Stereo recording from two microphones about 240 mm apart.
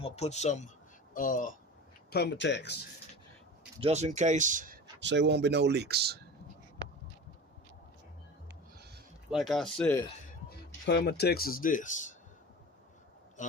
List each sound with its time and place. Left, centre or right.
0.0 s speech: left
3.8 s speech: right
4.9 s speech: right
9.3 s speech: centre
10.8 s speech: left